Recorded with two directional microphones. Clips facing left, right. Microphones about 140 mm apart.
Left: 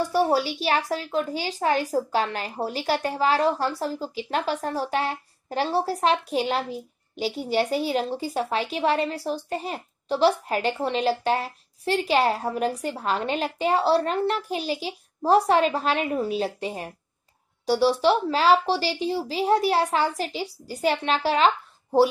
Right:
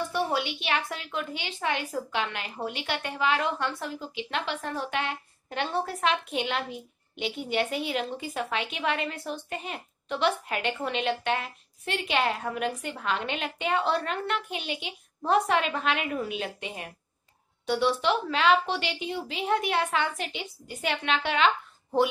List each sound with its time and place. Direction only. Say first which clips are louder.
0.0 s a woman's voice: left 6 dB; 35° left (ahead or behind)